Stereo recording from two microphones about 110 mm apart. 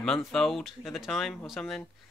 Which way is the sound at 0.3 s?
Centre (ahead or behind).